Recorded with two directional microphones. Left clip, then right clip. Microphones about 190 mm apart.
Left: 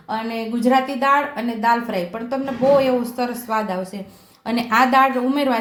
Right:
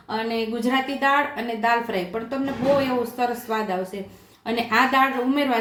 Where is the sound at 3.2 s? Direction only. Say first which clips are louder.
Left 2 dB; 35° left (ahead or behind).